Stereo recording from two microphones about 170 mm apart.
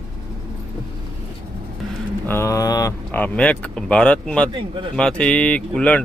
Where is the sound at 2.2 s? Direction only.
15° left (ahead or behind).